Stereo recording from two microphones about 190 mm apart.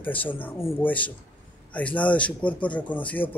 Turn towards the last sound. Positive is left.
turn(degrees=10)  # may be behind; listen again after turning